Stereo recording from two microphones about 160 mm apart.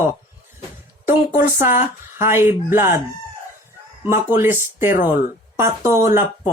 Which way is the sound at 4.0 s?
15° right (ahead or behind).